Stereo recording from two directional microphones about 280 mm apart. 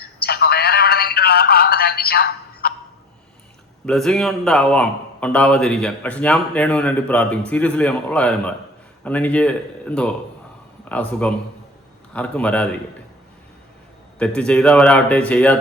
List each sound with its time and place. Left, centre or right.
0.2 s telephone: left
3.8 s a man's voice: centre
14.2 s a man's voice: centre